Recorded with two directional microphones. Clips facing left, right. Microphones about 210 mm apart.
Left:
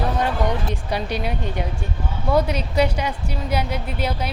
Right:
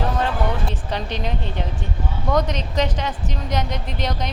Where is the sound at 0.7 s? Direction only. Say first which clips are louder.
Left 2 dB; 10° left (ahead or behind).